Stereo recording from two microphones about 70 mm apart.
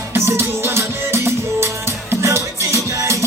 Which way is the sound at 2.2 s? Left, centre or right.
Right.